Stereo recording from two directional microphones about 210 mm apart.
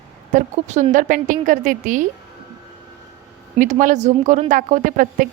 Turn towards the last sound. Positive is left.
turn(degrees=-40)  # may be behind; listen again after turning